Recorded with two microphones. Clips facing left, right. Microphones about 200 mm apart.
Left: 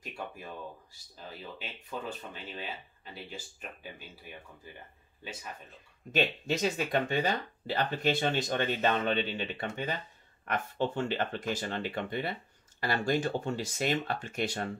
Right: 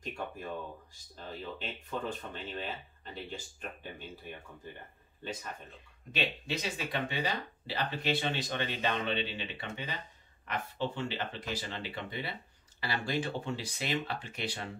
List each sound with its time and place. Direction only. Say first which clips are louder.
0.0 s a sound: right 2 dB; 10° left (ahead or behind)
1.1 s speech: right 3 dB; 10° left (ahead or behind)
5.2 s speech: right 3 dB; 10° left (ahead or behind)
6.1 s speech: left 5 dB; 45° left (ahead or behind)